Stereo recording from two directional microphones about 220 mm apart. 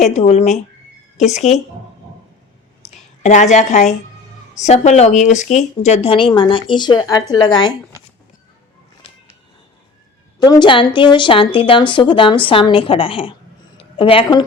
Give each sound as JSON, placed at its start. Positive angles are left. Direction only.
{"t": 0.0, "sound": "speech", "side_deg": 30}
{"t": 2.9, "sound": "a woman's voice", "side_deg": 30}
{"t": 10.4, "sound": "a woman's voice", "side_deg": 20}